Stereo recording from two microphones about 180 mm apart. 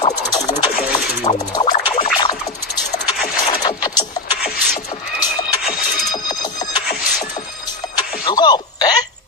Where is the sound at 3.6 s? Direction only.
25° left (ahead or behind).